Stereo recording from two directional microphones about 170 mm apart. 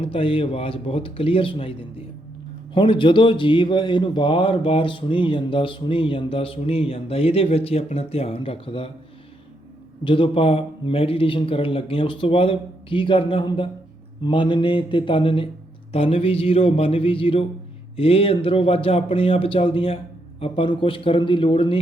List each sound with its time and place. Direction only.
0.0 s a man's voice: 30° left (ahead or behind)
10.0 s a man's voice: 30° left (ahead or behind)
14.3 s mantra: 30° left (ahead or behind)
15.9 s a man's voice: 35° left (ahead or behind)